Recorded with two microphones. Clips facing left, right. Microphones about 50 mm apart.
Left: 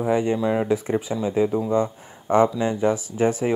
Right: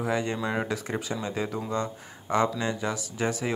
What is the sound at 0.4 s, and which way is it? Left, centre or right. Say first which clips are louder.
Speech: left 7 dB; centre.